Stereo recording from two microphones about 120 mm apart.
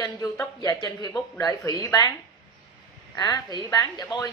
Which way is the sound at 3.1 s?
35° left (ahead or behind).